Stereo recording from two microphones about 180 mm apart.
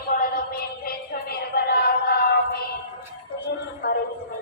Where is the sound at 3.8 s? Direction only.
60° left (ahead or behind).